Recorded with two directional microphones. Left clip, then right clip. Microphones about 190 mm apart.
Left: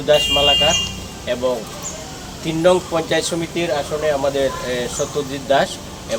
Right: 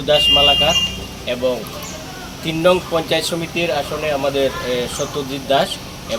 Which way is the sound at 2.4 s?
5° left (ahead or behind).